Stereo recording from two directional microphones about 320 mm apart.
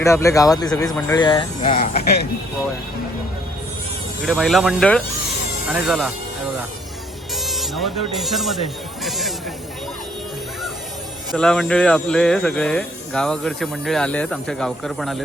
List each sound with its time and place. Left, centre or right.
0.0 s speech: centre
4.3 s speech: centre
7.4 s speech: centre
11.3 s speech: centre